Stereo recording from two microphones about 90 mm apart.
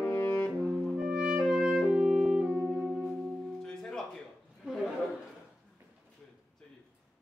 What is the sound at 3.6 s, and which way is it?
Music, 5° left (ahead or behind).